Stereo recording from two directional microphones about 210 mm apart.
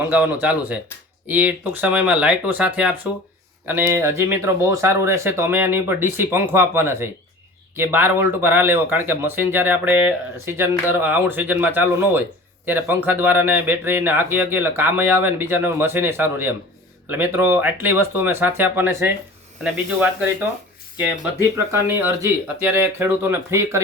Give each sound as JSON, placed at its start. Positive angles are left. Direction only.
{"t": 0.1, "sound": "speech", "side_deg": -10}